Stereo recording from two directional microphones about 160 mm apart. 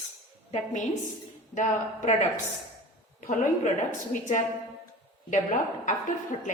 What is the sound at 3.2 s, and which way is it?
A woman's voice, 50° left (ahead or behind).